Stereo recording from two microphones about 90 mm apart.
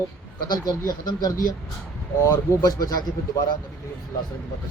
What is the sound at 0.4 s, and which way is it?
Speech, 45° left (ahead or behind).